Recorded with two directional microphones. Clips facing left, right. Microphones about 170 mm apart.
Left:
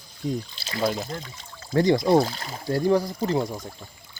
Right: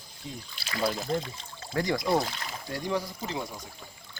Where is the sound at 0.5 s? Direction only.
25° left (ahead or behind).